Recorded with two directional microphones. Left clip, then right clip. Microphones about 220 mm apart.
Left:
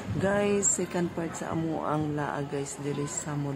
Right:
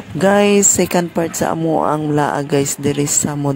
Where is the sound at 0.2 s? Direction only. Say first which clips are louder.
Right 14 dB; 45° right (ahead or behind).